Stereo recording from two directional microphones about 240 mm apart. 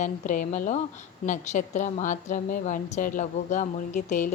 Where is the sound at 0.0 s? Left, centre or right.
Left.